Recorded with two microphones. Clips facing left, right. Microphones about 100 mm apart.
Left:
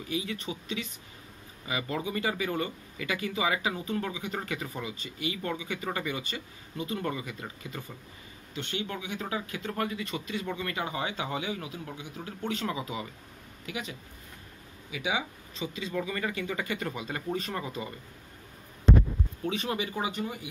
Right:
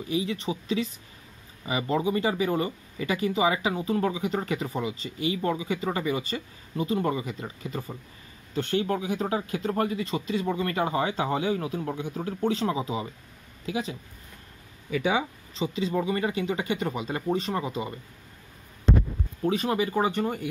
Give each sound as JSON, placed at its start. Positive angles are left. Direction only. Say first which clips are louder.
{"t": 0.1, "sound": "speech", "louder": "right 6 dB", "side_deg": -30}
{"t": 8.5, "sound": "speech", "louder": "right 9 dB", "side_deg": -40}
{"t": 14.9, "sound": "speech", "louder": "right 6 dB", "side_deg": -45}
{"t": 15.5, "sound": "speech", "louder": "right 6 dB", "side_deg": -30}
{"t": 19.4, "sound": "speech", "louder": "right 7 dB", "side_deg": -35}